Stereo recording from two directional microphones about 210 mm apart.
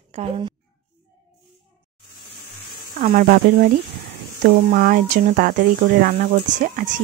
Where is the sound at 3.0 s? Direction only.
40° right (ahead or behind).